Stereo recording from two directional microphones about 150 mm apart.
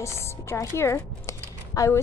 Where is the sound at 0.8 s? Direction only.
20° left (ahead or behind).